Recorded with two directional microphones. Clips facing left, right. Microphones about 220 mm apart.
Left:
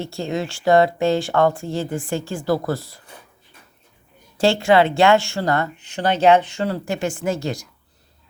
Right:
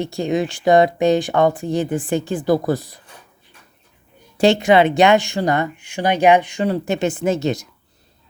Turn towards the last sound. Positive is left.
turn(degrees=-20)  # may be behind; listen again after turning